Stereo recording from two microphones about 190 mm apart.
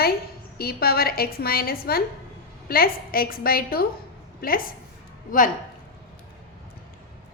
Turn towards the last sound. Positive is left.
turn(degrees=45)  # may be behind; listen again after turning